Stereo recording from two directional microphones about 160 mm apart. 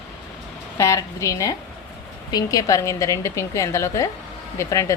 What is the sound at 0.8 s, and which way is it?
A woman's voice, 20° left (ahead or behind).